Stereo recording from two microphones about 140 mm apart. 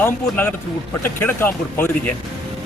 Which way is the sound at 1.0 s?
15° left (ahead or behind).